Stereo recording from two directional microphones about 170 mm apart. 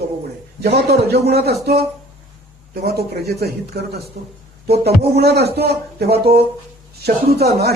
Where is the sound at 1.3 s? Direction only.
70° right (ahead or behind).